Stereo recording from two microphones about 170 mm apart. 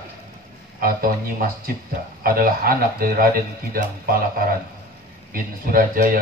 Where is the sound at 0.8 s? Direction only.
60° right (ahead or behind).